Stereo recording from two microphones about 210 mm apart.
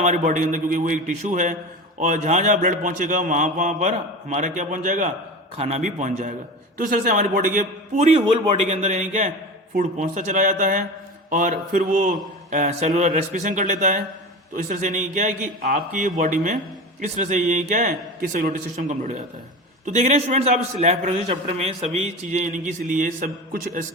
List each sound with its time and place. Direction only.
0.0 s speech: 35° right (ahead or behind)